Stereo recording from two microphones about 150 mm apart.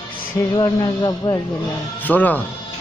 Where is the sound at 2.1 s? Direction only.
10° left (ahead or behind).